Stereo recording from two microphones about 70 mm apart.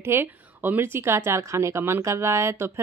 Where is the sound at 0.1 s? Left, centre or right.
Right.